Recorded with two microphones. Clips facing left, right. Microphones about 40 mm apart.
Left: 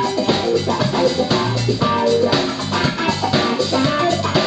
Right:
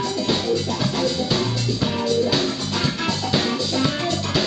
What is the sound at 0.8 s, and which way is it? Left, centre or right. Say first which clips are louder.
Music: left 6 dB; centre.